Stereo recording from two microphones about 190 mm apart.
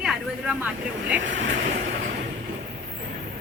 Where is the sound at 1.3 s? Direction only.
40° right (ahead or behind).